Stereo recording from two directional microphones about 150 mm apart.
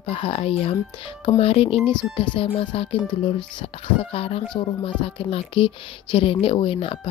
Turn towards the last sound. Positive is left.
turn(degrees=35)  # may be behind; listen again after turning